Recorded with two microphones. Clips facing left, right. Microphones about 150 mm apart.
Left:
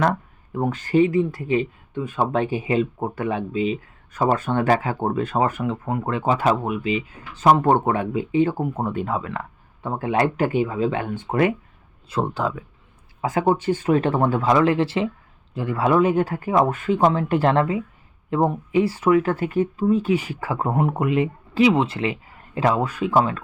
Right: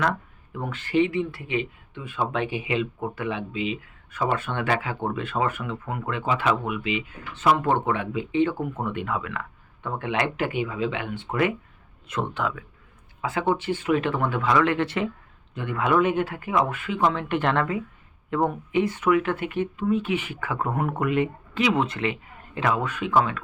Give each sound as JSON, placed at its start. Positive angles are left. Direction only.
{"t": 0.0, "sound": "speech", "side_deg": 40}